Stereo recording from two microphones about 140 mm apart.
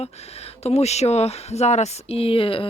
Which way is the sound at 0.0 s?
50° left (ahead or behind).